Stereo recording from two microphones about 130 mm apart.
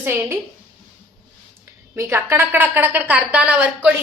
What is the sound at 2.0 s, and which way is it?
A woman's voice, 20° right (ahead or behind).